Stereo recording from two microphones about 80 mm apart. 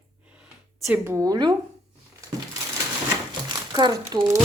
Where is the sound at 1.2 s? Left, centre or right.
Right.